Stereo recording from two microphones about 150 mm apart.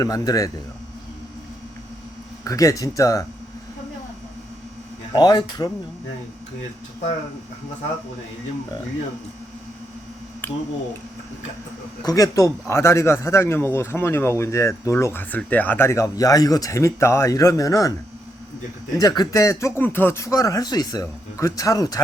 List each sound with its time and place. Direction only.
0.0 s a man's voice: 25° left (ahead or behind)
2.4 s a man's voice: 20° left (ahead or behind)
5.1 s a man's voice: 30° left (ahead or behind)
10.4 s a sound: 15° left (ahead or behind)
12.0 s a man's voice: 25° left (ahead or behind)
18.9 s a man's voice: 25° left (ahead or behind)